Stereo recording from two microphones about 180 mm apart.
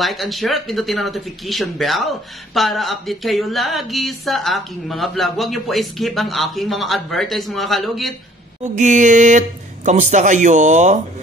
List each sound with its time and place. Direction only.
0.0 s speech: centre (ahead or behind)
8.7 s mantra: 45° right (ahead or behind)
9.8 s speech: 40° right (ahead or behind)